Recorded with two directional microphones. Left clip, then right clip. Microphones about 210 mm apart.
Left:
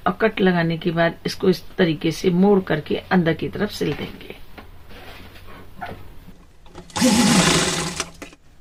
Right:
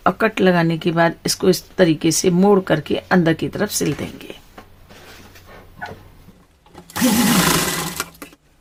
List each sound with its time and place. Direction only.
0.0 s speech: 40° right (ahead or behind)
6.9 s sewing machine: 5° right (ahead or behind)